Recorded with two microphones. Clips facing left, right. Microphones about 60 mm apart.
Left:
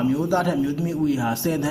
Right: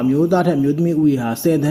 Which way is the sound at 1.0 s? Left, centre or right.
Right.